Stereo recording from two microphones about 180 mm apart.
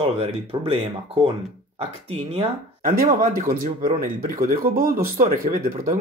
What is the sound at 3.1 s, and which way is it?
Speech, 50° right (ahead or behind).